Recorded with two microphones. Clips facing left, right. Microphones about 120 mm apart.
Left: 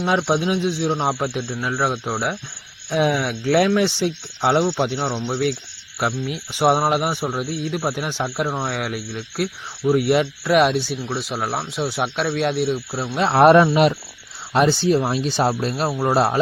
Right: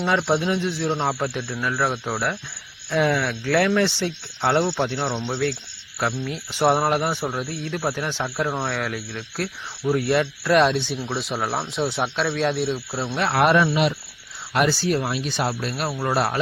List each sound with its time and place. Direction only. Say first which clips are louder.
0.3 s speech: left 2 dB; 15° left (ahead or behind)
2.0 s speech: left 1 dB; 5° left (ahead or behind)
2.9 s speech: left 1 dB; 20° left (ahead or behind)
4.9 s speech: left 2 dB; centre (ahead or behind)
6.0 s speech: left 2 dB; 15° left (ahead or behind)
13.1 s speech: left 4 dB; 25° left (ahead or behind)
13.4 s speech: left 7 dB; 40° left (ahead or behind)
14.5 s speech: left 4 dB; 25° left (ahead or behind)